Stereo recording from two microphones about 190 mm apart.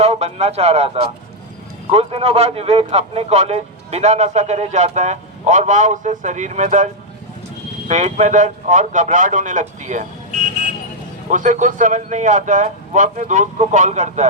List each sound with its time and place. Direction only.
0.0 s a man's voice: 35° right (ahead or behind)
7.9 s a man's voice: 40° right (ahead or behind)
11.3 s a man's voice: 40° right (ahead or behind)